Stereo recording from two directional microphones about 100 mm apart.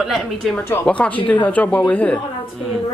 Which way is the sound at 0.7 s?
15° left (ahead or behind).